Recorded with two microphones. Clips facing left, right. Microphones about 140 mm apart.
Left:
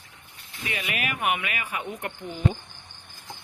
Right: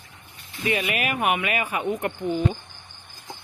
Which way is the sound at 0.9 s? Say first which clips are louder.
Right 4 dB; 50° right (ahead or behind).